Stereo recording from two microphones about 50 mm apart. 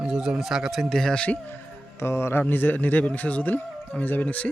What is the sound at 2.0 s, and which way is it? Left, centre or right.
Speech, left.